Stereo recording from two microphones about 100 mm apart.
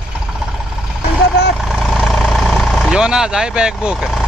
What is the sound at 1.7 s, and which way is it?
Vehicle, centre (ahead or behind).